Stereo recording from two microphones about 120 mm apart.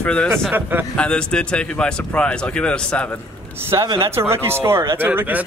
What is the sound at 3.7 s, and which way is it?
Speech, 25° right (ahead or behind).